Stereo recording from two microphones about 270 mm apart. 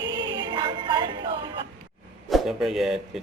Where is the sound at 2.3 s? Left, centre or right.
Centre.